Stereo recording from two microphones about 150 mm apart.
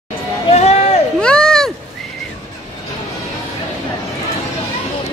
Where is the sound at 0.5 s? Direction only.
45° left (ahead or behind).